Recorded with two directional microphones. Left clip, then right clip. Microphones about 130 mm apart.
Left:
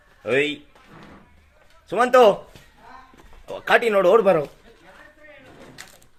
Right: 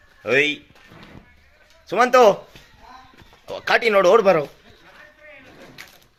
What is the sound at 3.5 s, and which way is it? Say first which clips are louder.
Speech: right 1 dB; 10° right (ahead or behind).